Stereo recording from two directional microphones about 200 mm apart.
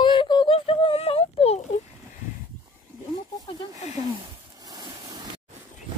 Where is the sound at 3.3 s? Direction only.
20° left (ahead or behind).